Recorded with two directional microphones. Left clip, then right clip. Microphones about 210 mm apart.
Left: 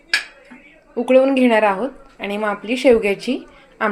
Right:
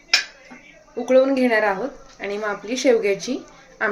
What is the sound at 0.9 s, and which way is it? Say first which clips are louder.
A woman's voice: left 3 dB; 25° left (ahead or behind).